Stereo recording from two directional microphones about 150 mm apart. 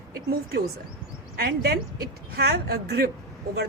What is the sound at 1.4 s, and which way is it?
Speech, 90° right.